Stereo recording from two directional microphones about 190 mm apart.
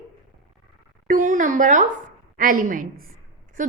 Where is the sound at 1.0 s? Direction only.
45° right (ahead or behind).